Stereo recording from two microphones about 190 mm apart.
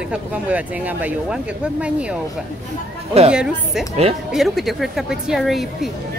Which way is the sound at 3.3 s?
5° right (ahead or behind).